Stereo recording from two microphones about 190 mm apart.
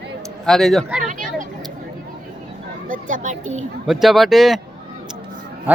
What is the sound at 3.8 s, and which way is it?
Speech, centre (ahead or behind).